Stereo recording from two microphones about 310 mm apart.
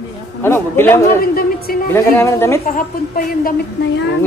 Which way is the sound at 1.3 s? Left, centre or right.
Left.